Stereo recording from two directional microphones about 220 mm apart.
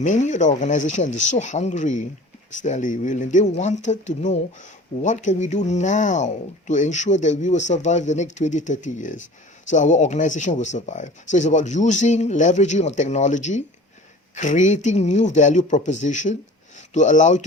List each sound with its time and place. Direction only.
0.0 s speech: 35° left (ahead or behind)